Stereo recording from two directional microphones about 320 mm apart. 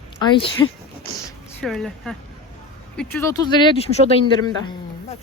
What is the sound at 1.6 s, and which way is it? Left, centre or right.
Speech, centre.